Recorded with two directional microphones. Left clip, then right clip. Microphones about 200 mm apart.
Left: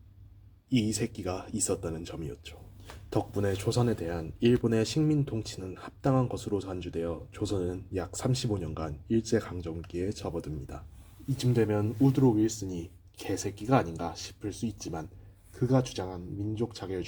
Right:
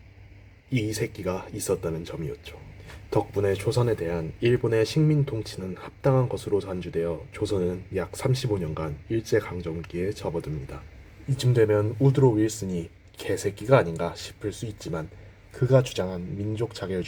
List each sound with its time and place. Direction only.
0.8 s speech: 35° left (ahead or behind)
11.3 s speech: 20° left (ahead or behind)